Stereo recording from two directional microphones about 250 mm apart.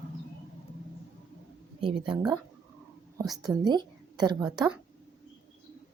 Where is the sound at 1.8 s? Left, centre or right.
Centre.